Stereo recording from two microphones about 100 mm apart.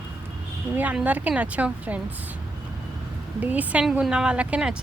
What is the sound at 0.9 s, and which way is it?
A woman's voice, 15° right (ahead or behind).